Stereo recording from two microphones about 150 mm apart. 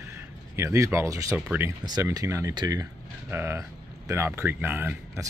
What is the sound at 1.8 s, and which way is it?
Speech, 25° right (ahead or behind).